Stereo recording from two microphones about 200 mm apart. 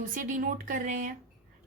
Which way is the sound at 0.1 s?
40° right (ahead or behind).